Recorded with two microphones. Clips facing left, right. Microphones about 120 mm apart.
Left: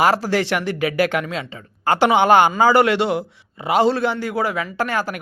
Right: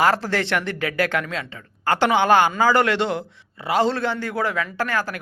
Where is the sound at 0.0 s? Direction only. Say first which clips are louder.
Left 2 dB; 10° left (ahead or behind).